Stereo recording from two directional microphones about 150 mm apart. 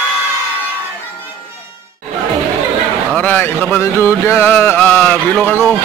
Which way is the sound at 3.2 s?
10° left (ahead or behind).